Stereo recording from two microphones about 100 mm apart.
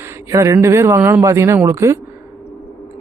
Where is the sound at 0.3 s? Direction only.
35° right (ahead or behind).